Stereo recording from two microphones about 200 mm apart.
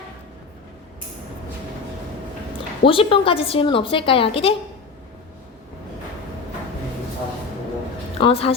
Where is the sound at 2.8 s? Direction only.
25° left (ahead or behind).